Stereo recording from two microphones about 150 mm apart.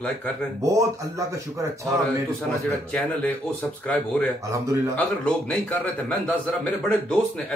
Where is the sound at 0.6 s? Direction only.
20° right (ahead or behind).